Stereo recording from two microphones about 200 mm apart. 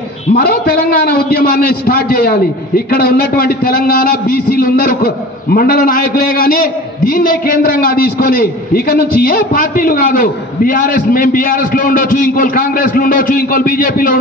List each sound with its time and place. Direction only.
0.3 s a man's voice: 50° left (ahead or behind)